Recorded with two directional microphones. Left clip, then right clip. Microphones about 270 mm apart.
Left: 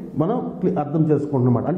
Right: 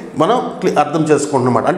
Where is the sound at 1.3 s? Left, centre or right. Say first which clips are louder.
Right 8 dB; centre.